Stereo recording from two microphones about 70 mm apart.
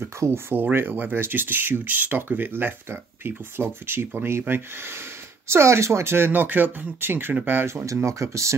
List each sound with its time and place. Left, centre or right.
0.0 s speech: right